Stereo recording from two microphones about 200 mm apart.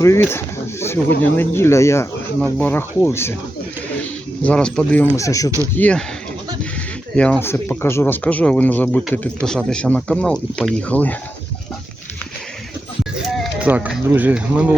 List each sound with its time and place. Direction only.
0.0 s speech: 15° left (ahead or behind)
4.4 s speech: 5° left (ahead or behind)
5.1 s speech: 15° left (ahead or behind)
7.2 s speech: 10° left (ahead or behind)
13.1 s speech: centre (ahead or behind)